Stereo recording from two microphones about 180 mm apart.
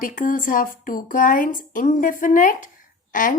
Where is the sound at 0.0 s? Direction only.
50° left (ahead or behind).